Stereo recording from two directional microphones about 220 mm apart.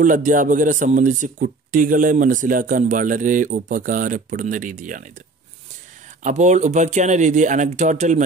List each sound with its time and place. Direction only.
0.0 s speech: 35° right (ahead or behind)
6.2 s speech: 30° right (ahead or behind)